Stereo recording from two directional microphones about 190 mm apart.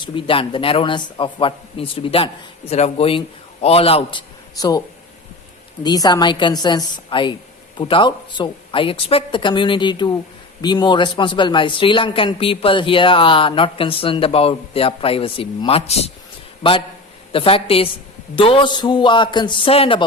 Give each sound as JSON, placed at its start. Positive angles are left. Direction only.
{"t": 0.0, "sound": "speech", "side_deg": 25}
{"t": 4.5, "sound": "speech", "side_deg": 20}
{"t": 5.8, "sound": "speech", "side_deg": 20}